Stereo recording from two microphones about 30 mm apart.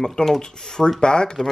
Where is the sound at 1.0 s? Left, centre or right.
Left.